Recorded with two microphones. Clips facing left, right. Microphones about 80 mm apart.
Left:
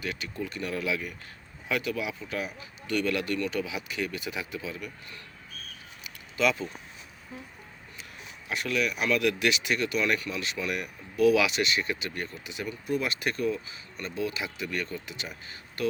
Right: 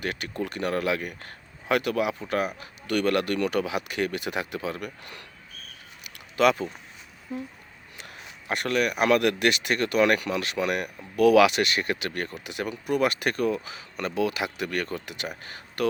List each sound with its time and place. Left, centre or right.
0.0 s speech: right
6.3 s speech: right
8.4 s speech: right